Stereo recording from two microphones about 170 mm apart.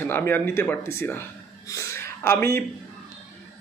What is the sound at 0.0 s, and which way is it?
Speech, 15° left (ahead or behind).